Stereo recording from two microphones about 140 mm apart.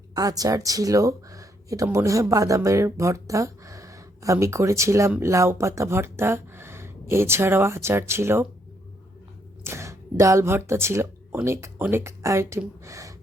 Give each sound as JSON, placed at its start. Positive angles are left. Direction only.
{"t": 0.1, "sound": "speech", "side_deg": -25}
{"t": 9.6, "sound": "speech", "side_deg": -20}